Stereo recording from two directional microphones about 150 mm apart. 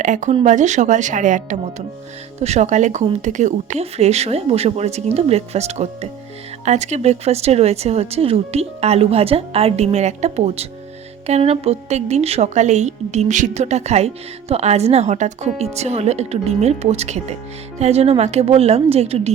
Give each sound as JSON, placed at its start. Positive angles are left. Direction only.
{"t": 0.0, "sound": "a woman's voice", "side_deg": -55}